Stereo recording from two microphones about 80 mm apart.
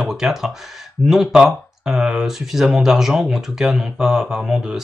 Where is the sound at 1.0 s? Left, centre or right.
Centre.